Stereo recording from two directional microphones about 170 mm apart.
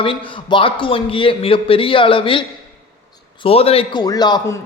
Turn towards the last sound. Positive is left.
turn(degrees=20)  # may be behind; listen again after turning